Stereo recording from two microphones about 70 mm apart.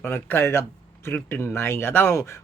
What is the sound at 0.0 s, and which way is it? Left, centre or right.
Speech, left.